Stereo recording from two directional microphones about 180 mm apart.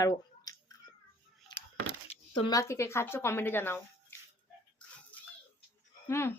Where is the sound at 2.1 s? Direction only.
25° left (ahead or behind).